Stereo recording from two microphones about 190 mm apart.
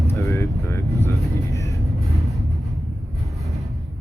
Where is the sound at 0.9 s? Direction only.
15° left (ahead or behind).